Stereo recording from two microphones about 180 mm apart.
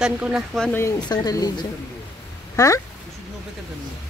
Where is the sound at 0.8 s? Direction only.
20° left (ahead or behind).